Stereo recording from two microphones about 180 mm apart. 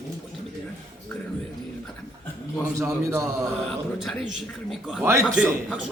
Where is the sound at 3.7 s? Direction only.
Centre (ahead or behind).